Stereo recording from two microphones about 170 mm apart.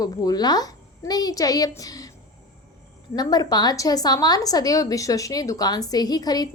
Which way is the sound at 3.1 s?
25° left (ahead or behind).